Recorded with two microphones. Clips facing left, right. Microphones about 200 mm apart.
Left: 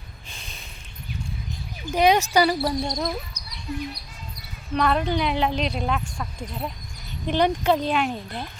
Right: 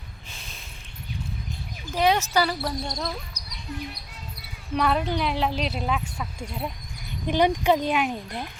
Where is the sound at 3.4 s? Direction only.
35° right (ahead or behind).